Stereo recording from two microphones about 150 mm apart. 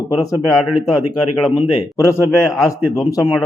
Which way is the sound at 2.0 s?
20° left (ahead or behind).